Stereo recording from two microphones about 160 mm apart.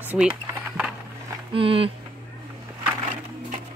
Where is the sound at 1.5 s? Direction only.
35° right (ahead or behind).